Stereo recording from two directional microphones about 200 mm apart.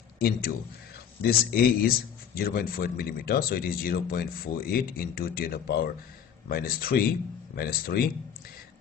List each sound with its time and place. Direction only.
0.2 s speech: 50° left (ahead or behind)